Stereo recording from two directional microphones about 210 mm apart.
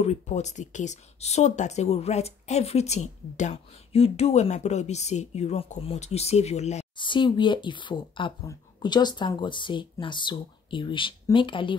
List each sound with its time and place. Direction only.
0.0 s speech: 30° left (ahead or behind)